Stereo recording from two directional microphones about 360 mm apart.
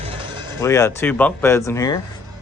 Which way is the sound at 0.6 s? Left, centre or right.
Centre.